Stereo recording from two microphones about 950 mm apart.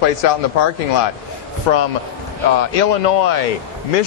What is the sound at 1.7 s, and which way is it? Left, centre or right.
Speech, left.